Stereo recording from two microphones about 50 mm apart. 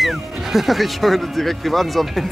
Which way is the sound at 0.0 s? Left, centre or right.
Centre.